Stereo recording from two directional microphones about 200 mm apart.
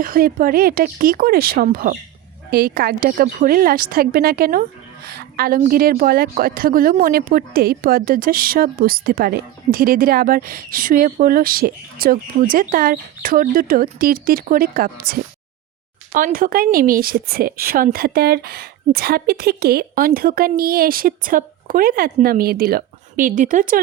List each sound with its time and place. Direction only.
0.0 s a woman's voice: 45° right (ahead or behind)